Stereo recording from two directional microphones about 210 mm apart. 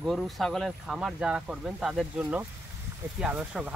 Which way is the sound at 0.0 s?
Centre (ahead or behind).